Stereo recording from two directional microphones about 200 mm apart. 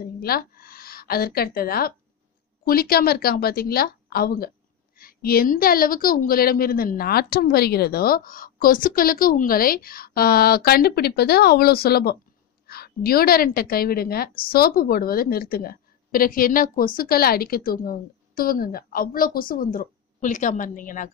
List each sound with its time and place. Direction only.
0.2 s a woman's voice: 50° left (ahead or behind)